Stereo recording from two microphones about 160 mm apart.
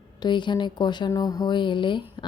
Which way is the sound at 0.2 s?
30° left (ahead or behind).